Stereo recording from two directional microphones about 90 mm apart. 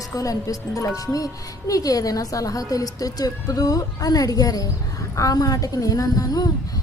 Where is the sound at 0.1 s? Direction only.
40° left (ahead or behind).